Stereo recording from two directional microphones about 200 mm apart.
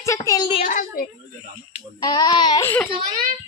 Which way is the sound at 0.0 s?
15° left (ahead or behind).